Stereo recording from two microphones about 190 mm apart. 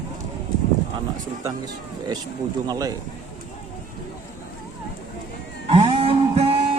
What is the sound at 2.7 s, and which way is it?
Speech, 20° right (ahead or behind).